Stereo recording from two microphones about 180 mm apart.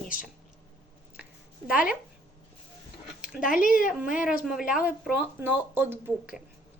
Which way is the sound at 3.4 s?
50° left (ahead or behind).